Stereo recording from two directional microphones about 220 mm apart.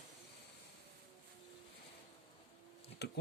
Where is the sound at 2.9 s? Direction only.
50° left (ahead or behind).